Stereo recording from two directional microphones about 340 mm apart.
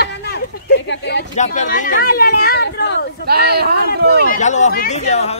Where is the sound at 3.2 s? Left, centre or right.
Right.